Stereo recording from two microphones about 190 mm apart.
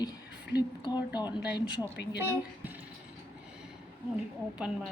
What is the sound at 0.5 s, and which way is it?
Speech, 20° left (ahead or behind).